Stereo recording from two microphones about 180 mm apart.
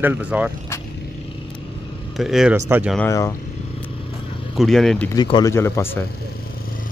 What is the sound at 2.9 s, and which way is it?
Speech, 15° left (ahead or behind).